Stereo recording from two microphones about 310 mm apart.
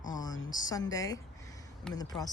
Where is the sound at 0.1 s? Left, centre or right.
Centre.